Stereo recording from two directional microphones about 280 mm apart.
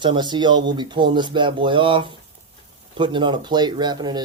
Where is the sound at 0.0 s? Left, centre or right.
Centre.